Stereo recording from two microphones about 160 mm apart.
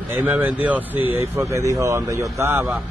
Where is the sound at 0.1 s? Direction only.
10° right (ahead or behind).